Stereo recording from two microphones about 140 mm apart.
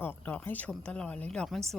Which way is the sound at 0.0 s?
15° left (ahead or behind).